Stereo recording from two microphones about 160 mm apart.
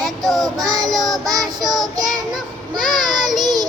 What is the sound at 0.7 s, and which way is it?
Child singing, 20° right (ahead or behind).